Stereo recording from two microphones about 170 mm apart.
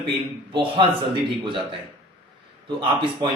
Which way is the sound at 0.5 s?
30° right (ahead or behind).